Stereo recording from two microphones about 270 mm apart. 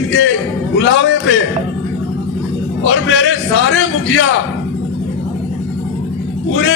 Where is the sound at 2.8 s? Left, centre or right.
Left.